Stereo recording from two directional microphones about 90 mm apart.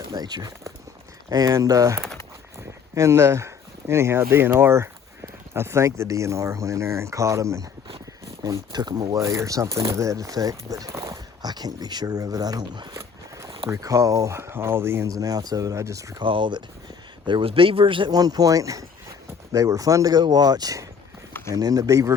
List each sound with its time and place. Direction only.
0.1 s speech: 50° right (ahead or behind)
8.4 s speech: 50° right (ahead or behind)
9.1 s speech: 35° right (ahead or behind)
10.7 s a sound: 40° right (ahead or behind)
11.4 s speech: 50° right (ahead or behind)
12.9 s zipper: 30° right (ahead or behind)
13.7 s speech: 40° right (ahead or behind)
15.1 s speech: 40° right (ahead or behind)
16.2 s speech: 70° right (ahead or behind)
17.2 s speech: 75° right (ahead or behind)
18.1 s speech: 45° right (ahead or behind)